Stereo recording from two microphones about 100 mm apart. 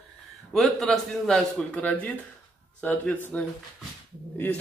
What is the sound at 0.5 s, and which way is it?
Speech, centre (ahead or behind).